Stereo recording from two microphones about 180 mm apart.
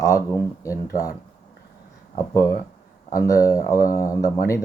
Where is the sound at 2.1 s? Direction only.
20° left (ahead or behind).